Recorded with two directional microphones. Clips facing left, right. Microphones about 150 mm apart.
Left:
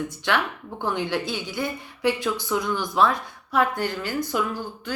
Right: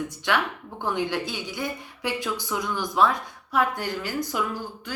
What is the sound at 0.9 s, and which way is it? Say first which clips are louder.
A woman's voice: even; 15° right (ahead or behind).